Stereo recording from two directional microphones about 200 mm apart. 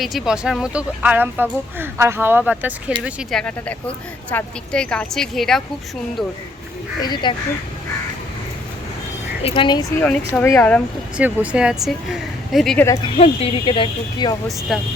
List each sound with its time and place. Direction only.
0.0 s speech: centre (ahead or behind)
7.0 s speech: 20° left (ahead or behind)
9.4 s speech: 25° left (ahead or behind)
10.0 s speech: 10° left (ahead or behind)
11.2 s speech: 5° right (ahead or behind)
12.8 s speech: 15° left (ahead or behind)
13.1 s speech: 30° left (ahead or behind)
14.7 s speech: centre (ahead or behind)